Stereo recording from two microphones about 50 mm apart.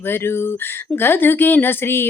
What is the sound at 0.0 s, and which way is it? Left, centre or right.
Speech, left.